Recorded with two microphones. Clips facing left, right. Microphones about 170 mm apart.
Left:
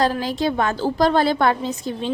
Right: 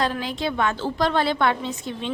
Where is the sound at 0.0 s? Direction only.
40° left (ahead or behind).